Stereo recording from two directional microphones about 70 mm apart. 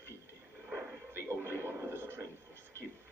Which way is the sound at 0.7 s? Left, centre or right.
Right.